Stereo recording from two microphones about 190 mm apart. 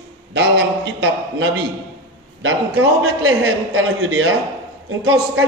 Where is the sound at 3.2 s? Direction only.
90° right.